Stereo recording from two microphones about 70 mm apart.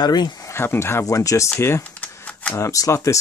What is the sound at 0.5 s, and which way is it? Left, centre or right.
Speech, left.